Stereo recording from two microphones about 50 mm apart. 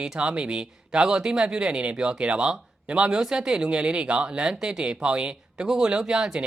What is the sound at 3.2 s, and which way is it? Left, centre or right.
Speech, centre.